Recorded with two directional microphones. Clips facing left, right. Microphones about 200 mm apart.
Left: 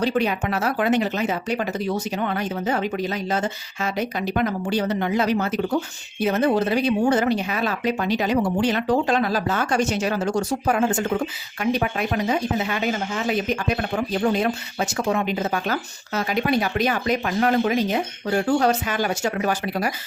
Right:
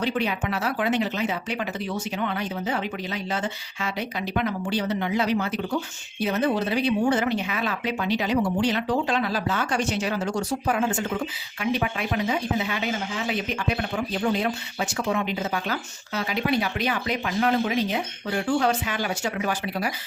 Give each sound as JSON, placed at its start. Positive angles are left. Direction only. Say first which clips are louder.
{"t": 0.0, "sound": "speech", "louder": "left 4 dB", "side_deg": 45}